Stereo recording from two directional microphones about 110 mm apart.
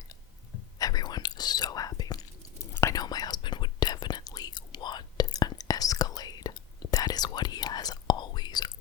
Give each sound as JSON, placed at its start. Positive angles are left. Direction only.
{"t": 0.8, "sound": "whispering", "side_deg": 35}